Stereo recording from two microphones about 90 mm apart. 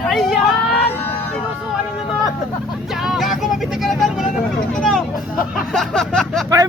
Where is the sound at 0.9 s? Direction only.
20° left (ahead or behind).